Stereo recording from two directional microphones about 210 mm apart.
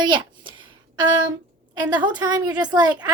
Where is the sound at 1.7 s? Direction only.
20° right (ahead or behind).